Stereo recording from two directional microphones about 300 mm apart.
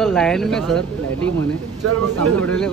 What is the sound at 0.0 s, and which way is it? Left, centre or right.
Speech, centre.